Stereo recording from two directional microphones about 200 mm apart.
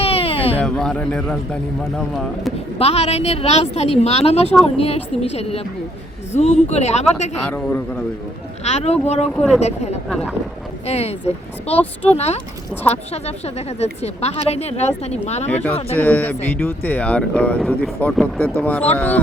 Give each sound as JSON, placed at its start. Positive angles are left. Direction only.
{"t": 0.0, "sound": "a sound", "side_deg": 30}
{"t": 0.6, "sound": "a man's voice", "side_deg": 5}
{"t": 2.7, "sound": "a woman's voice", "side_deg": 30}
{"t": 7.5, "sound": "speech", "side_deg": 10}
{"t": 8.6, "sound": "a woman's voice", "side_deg": 35}
{"t": 9.3, "sound": "a man's voice", "side_deg": 5}
{"t": 9.6, "sound": "a woman's voice", "side_deg": 35}
{"t": 10.1, "sound": "a man's voice", "side_deg": 0}
{"t": 10.8, "sound": "a woman's voice", "side_deg": 30}
{"t": 15.4, "sound": "speech", "side_deg": 10}